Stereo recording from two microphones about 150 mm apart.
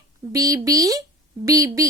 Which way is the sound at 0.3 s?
25° right (ahead or behind).